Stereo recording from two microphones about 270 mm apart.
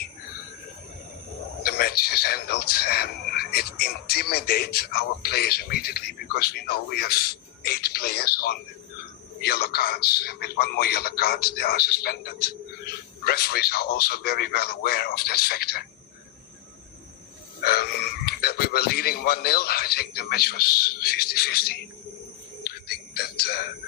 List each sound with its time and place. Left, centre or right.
1.6 s a man's voice: left
17.6 s a sound: left
18.3 s a man's voice: left
22.6 s music: left